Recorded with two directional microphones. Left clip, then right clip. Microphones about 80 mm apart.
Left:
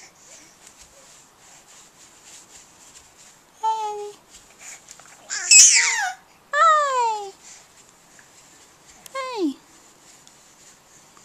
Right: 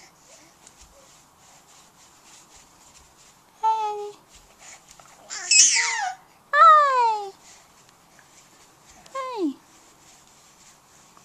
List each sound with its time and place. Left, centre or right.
3.6 s babbling: left
4.6 s babbling: centre
6.5 s baby cry: left
9.1 s babbling: left